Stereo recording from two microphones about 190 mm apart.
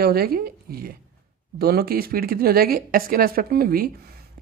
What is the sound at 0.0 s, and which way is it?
Speech, 55° right (ahead or behind).